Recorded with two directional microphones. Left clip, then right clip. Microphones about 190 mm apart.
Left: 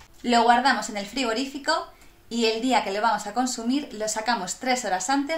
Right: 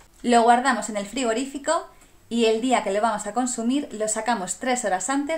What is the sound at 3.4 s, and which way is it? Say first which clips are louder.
Speech: right 1 dB; 90° right.